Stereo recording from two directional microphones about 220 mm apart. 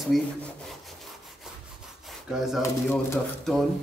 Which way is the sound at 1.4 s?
Centre (ahead or behind).